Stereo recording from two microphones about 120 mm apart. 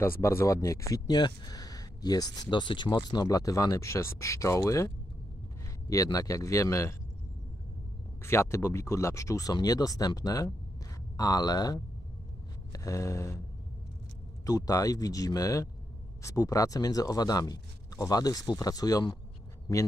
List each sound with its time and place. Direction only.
0.0 s speech: 20° left (ahead or behind)
5.9 s speech: 30° left (ahead or behind)
8.2 s speech: 20° left (ahead or behind)
14.4 s speech: 30° left (ahead or behind)